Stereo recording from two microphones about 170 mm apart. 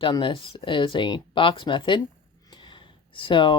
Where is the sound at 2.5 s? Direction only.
25° left (ahead or behind).